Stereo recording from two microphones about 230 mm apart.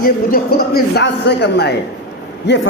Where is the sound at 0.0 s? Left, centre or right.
Left.